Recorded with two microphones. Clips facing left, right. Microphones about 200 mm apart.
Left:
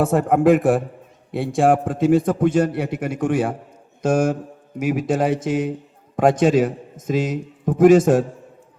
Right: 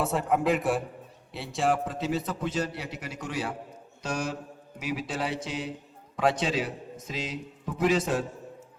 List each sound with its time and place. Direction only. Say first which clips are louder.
0.0 s a man's voice: left 10 dB; 50° left (ahead or behind)